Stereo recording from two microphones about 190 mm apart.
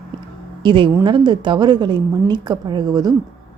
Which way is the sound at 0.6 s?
25° right (ahead or behind).